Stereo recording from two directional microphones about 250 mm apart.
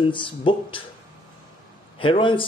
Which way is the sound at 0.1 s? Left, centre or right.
Centre.